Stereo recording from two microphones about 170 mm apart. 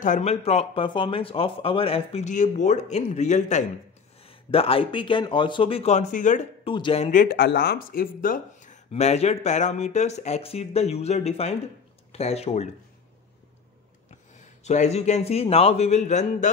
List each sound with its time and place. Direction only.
0.0 s a man's voice: 45° left (ahead or behind)
4.3 s a man's voice: 35° left (ahead or behind)
6.6 s a man's voice: 30° left (ahead or behind)
7.1 s speech: 55° left (ahead or behind)
8.9 s a man's voice: 40° left (ahead or behind)
14.6 s a man's voice: 40° left (ahead or behind)